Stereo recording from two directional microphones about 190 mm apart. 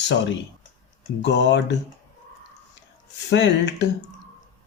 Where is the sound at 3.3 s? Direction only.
65° left (ahead or behind).